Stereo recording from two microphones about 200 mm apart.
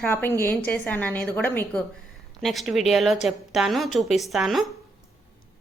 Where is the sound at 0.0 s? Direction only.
10° left (ahead or behind).